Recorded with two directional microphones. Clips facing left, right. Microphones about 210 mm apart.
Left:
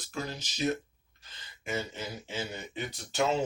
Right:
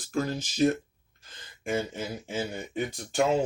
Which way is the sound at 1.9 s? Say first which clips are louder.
Right 5 dB; 50° right (ahead or behind).